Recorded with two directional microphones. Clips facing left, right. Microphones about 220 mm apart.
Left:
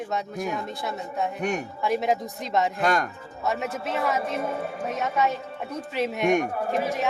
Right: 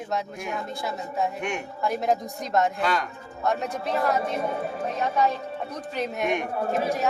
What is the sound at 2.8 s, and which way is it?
Speech, 50° left (ahead or behind).